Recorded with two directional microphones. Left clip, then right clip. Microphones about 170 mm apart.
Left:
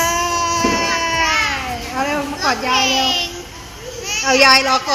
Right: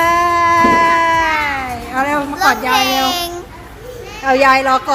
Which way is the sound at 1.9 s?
5° right (ahead or behind).